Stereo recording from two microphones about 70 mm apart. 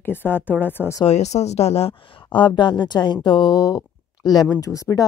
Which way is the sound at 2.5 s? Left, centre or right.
Left.